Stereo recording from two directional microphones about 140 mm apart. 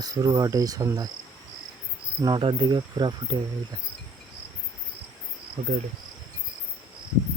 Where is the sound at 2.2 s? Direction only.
35° right (ahead or behind).